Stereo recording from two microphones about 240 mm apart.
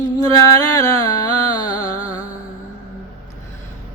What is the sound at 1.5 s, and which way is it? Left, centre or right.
Music, centre.